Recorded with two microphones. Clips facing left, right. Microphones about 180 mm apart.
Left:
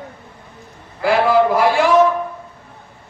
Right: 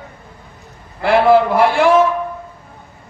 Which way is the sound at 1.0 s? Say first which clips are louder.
Right 2 dB; 60° right (ahead or behind).